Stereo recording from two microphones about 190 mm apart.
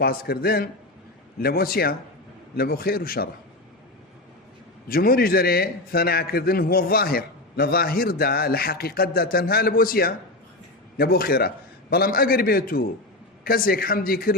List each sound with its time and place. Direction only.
0.0 s a man's voice: 55° left (ahead or behind)
4.9 s a man's voice: 50° left (ahead or behind)